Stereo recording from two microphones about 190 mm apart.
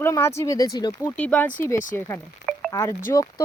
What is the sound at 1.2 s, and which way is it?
Speech, 10° left (ahead or behind).